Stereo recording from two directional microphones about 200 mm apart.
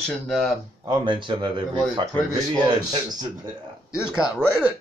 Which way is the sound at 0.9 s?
25° right (ahead or behind).